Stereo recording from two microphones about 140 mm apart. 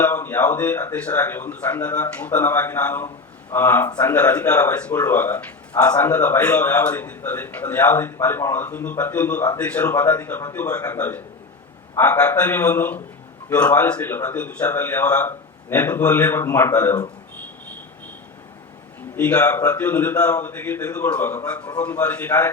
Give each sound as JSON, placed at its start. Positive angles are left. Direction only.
{"t": 0.0, "sound": "speech", "side_deg": 15}
{"t": 19.1, "sound": "speech", "side_deg": 10}